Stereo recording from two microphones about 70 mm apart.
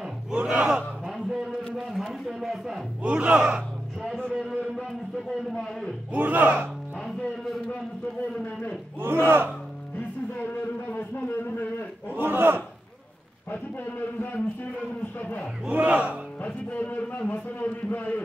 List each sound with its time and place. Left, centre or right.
0.0 s battle cry: centre
1.0 s a sound: centre
1.9 s a man's voice: centre
3.0 s speech: centre
4.0 s a sound: centre
4.4 s music: centre
6.1 s speech: right
8.4 s a man's voice: left
9.0 s speech: right
9.9 s a sound: left
12.2 s speech: right
13.5 s a man's voice: left
15.6 s speech: centre
16.3 s a man's voice: left